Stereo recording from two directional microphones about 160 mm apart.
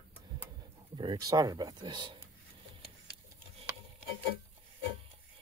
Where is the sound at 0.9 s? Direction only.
30° right (ahead or behind).